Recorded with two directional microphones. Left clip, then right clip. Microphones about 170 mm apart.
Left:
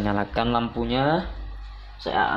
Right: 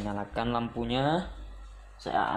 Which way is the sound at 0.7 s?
25° right (ahead or behind).